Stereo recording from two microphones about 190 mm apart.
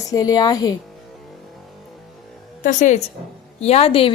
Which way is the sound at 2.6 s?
40° left (ahead or behind).